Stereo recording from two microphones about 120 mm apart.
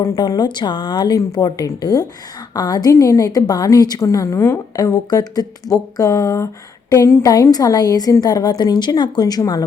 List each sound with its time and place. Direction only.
0.0 s a woman's voice: 30° left (ahead or behind)